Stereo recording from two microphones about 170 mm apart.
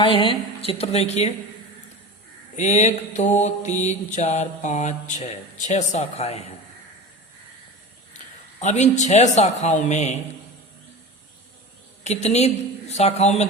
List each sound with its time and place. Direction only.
0.0 s a woman's voice: 30° left (ahead or behind)
2.6 s mantra: 45° left (ahead or behind)
8.6 s mantra: 40° left (ahead or behind)
12.0 s a woman's voice: 40° left (ahead or behind)